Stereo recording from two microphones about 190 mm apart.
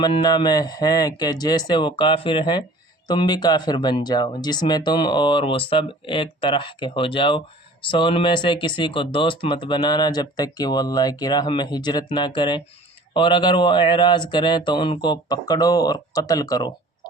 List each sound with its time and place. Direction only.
0.0 s speech: 25° left (ahead or behind)